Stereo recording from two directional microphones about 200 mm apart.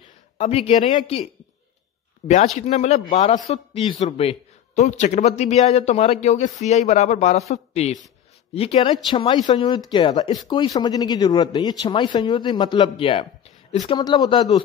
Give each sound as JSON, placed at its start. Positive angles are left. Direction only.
{"t": 0.4, "sound": "a man's voice", "side_deg": 30}